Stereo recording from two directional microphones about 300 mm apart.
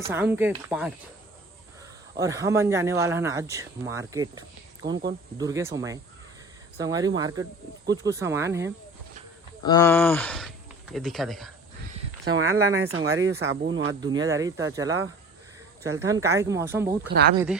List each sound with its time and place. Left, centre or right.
0.1 s speech: centre
2.1 s speech: centre
4.8 s speech: right
5.4 s speech: centre
9.6 s speech: centre
12.2 s speech: right
14.0 s speech: centre
17.1 s speech: right
17.3 s speech: centre